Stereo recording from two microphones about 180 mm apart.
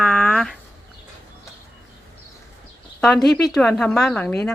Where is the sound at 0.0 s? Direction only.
5° left (ahead or behind).